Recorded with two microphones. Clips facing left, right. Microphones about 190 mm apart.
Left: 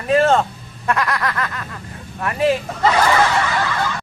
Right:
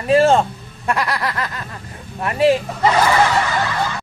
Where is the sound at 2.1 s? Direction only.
25° right (ahead or behind).